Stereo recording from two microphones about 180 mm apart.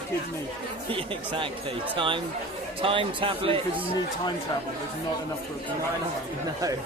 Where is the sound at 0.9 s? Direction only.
30° right (ahead or behind).